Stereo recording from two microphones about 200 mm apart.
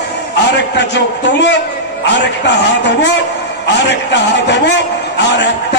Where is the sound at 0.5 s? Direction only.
60° left (ahead or behind).